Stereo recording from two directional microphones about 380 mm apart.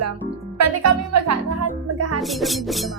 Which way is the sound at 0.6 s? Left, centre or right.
Right.